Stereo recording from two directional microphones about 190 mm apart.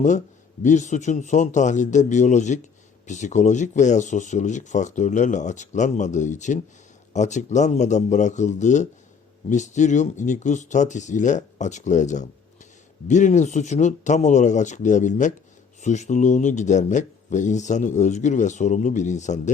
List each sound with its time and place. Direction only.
0.6 s speech: 40° left (ahead or behind)